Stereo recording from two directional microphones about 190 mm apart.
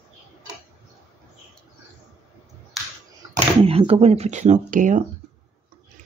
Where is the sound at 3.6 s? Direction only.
30° right (ahead or behind).